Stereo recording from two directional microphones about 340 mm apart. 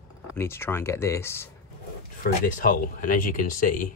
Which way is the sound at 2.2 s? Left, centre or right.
Left.